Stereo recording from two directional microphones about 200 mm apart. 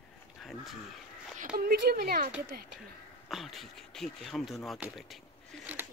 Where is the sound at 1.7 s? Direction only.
50° right (ahead or behind).